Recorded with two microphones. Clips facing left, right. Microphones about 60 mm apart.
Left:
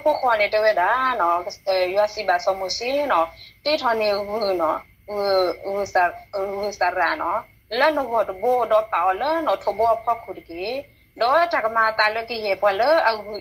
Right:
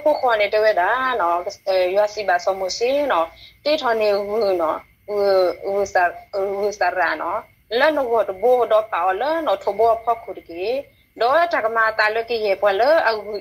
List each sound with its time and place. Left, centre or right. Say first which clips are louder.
0.0 s a woman's voice: right 2 dB; centre
9.8 s a woman's voice: right 2 dB; centre